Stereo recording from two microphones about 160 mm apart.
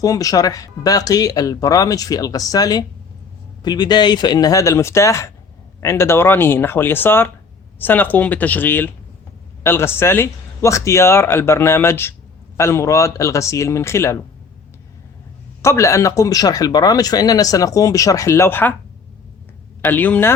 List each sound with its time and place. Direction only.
0.0 s speech: 20° left (ahead or behind)
15.6 s speech: 20° left (ahead or behind)
19.8 s speech: 10° left (ahead or behind)